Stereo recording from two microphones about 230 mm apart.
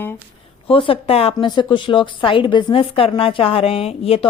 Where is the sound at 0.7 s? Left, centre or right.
Left.